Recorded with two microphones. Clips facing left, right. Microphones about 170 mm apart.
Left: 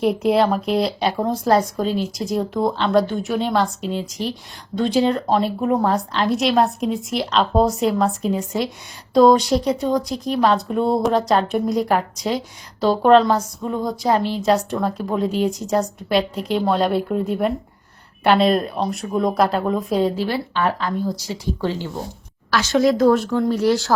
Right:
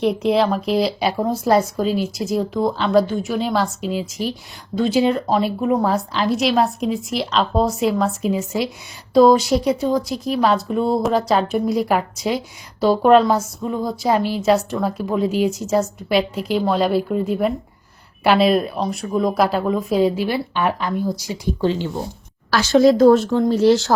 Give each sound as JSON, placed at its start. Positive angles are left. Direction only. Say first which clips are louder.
{"t": 0.0, "sound": "speech", "louder": "even", "side_deg": 0}
{"t": 22.5, "sound": "a woman's voice", "louder": "right 4 dB", "side_deg": -30}